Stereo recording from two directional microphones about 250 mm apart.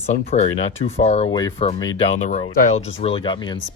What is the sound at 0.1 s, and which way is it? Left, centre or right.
Speech, left.